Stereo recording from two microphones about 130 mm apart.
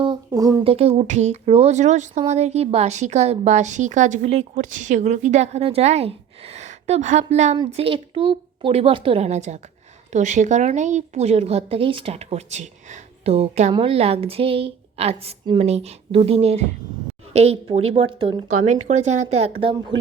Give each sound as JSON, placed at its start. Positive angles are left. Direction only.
{"t": 0.0, "sound": "a sound", "side_deg": -30}
{"t": 0.6, "sound": "speech", "side_deg": -50}
{"t": 7.7, "sound": "a woman's voice", "side_deg": -45}
{"t": 18.6, "sound": "speech", "side_deg": -65}